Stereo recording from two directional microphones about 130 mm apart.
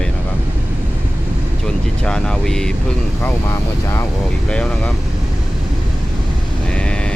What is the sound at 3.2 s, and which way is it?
Vehicle, 20° left (ahead or behind).